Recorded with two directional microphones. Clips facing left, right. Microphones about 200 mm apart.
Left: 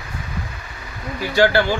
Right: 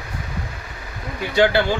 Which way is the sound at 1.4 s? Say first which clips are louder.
Left 1 dB; 20° right (ahead or behind).